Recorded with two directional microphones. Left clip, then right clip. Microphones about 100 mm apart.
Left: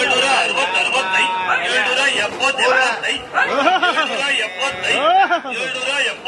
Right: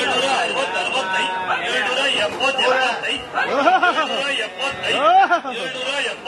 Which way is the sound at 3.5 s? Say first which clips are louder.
Right 1 dB; 15° left (ahead or behind).